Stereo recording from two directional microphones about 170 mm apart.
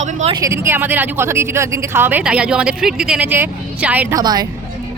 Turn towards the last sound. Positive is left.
turn(degrees=-25)  # may be behind; listen again after turning